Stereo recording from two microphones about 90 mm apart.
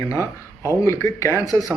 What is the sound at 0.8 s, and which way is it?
Speech, 30° left (ahead or behind).